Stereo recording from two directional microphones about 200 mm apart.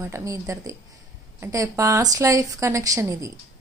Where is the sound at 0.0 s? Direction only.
15° right (ahead or behind).